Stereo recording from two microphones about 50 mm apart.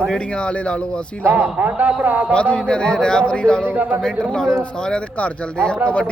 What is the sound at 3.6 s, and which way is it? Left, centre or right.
Speech, right.